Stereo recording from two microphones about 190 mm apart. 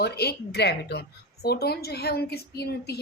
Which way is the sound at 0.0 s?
60° left (ahead or behind).